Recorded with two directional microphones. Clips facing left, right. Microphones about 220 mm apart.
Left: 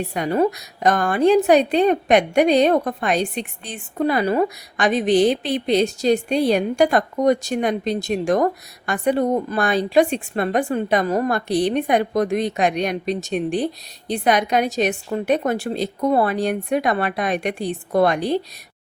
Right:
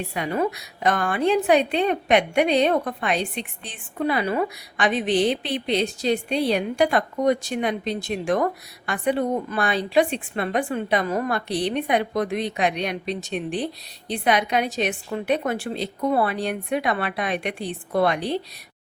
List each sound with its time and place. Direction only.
0.1 s a woman's voice: 40° left (ahead or behind)